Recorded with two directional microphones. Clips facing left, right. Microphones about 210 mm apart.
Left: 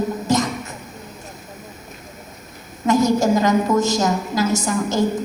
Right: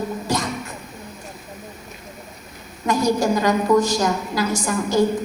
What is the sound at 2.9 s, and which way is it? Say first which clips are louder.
A woman's voice: left 3 dB; 20° left (ahead or behind).